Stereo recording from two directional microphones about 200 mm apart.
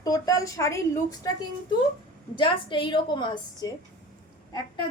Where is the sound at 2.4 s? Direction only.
25° left (ahead or behind).